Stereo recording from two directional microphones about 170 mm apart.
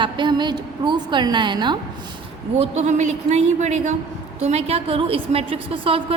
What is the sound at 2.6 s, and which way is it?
A woman's voice, 40° right (ahead or behind).